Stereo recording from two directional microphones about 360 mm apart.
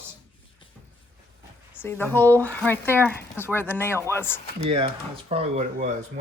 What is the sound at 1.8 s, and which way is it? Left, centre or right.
Speech, centre.